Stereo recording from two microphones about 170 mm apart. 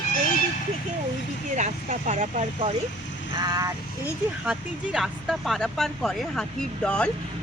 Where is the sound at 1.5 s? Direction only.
45° right (ahead or behind).